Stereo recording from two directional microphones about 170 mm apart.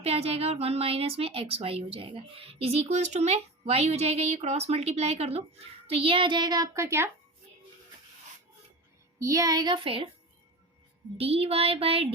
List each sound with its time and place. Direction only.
0.0 s a woman's voice: 35° right (ahead or behind); by 7.1 s 15° right (ahead or behind)
9.1 s a child's voice: 20° right (ahead or behind)
11.2 s a woman's voice: 35° right (ahead or behind)